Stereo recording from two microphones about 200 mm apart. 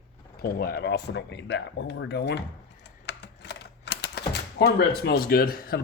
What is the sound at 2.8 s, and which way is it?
Typing, 60° left (ahead or behind).